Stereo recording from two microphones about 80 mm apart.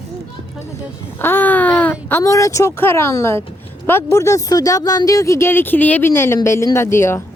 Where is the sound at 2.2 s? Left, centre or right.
Left.